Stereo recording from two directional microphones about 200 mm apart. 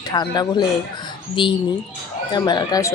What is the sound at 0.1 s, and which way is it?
Speech, 20° left (ahead or behind).